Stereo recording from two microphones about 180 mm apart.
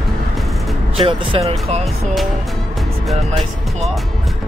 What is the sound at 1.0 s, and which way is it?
Speech, 30° right (ahead or behind).